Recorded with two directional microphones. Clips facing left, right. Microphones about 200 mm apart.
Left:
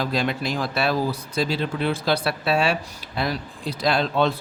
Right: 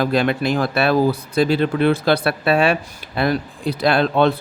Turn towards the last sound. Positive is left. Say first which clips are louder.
# right 5 dB
turn(degrees=-60)  # may be behind; listen again after turning